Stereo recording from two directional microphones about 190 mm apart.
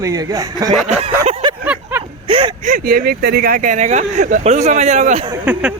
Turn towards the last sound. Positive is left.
turn(degrees=-5)  # may be behind; listen again after turning